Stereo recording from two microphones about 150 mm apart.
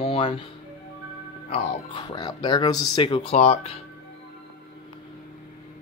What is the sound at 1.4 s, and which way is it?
Speech, 35° left (ahead or behind).